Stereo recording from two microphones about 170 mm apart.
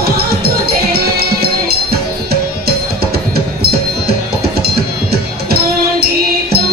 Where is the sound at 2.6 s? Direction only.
70° right (ahead or behind).